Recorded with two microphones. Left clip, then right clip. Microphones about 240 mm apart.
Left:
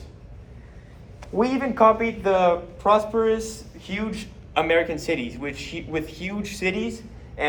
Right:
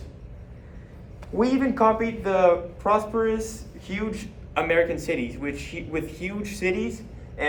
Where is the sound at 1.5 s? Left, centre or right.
Left.